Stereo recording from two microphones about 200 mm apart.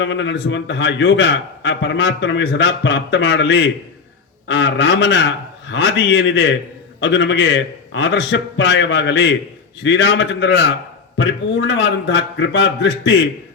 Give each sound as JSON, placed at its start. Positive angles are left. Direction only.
{"t": 0.0, "sound": "a man's voice", "side_deg": 65}